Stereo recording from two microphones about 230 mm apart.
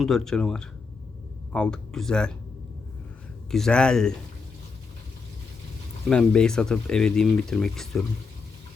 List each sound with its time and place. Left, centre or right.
0.0 s speech: centre
3.5 s speech: centre
6.1 s speech: centre